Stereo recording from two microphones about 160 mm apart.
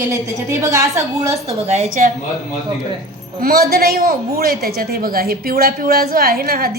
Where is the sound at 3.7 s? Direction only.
70° right (ahead or behind).